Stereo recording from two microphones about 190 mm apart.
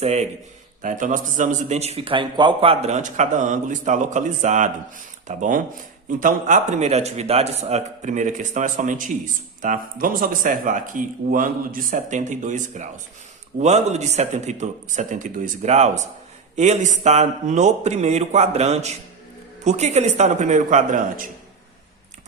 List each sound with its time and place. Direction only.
0.0 s a man's voice: 35° right (ahead or behind)